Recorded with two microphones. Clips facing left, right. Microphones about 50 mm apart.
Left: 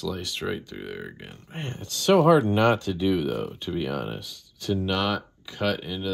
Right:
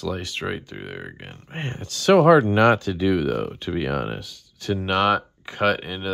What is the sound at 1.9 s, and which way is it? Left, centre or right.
Speech, right.